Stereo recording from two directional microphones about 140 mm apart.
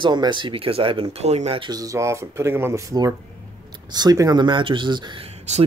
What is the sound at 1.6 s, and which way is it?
Speech, 25° right (ahead or behind).